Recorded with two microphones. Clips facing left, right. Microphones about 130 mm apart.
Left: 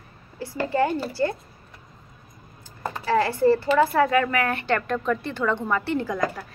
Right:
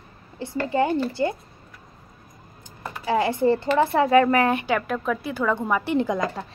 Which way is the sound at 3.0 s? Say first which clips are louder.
Left 1 dB; 15° right (ahead or behind).